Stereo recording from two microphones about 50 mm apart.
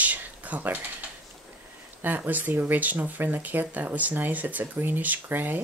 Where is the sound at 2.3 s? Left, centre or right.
Right.